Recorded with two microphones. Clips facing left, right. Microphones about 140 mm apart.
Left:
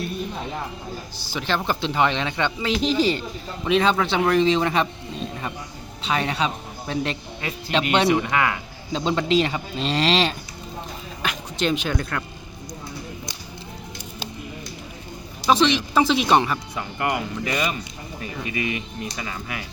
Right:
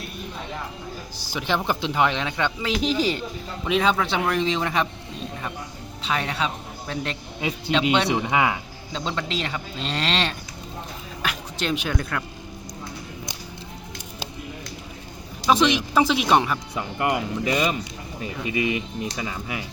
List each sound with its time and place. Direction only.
1.3 s speech: 15° right (ahead or behind)
6.0 s a man's voice: centre (ahead or behind)
8.1 s speech: 15° right (ahead or behind)
9.1 s speech: 10° left (ahead or behind)
15.4 s speech: 10° right (ahead or behind)
16.7 s speech: 20° right (ahead or behind)